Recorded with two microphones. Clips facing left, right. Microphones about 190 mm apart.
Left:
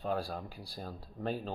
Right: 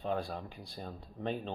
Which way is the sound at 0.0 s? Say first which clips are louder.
Even; 5° left (ahead or behind).